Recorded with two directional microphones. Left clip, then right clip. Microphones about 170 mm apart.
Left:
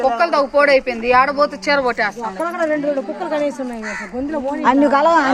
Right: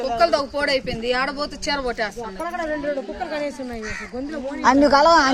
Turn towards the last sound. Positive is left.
turn(degrees=-35)  # may be behind; listen again after turning